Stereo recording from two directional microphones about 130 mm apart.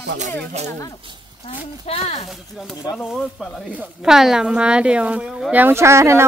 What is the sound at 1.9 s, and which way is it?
Speech, 50° left (ahead or behind).